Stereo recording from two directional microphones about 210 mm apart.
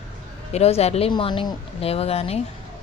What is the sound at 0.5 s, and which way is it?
Speech, 30° left (ahead or behind).